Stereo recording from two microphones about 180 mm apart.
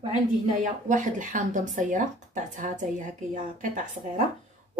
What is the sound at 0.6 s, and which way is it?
A woman's voice, 45° right (ahead or behind).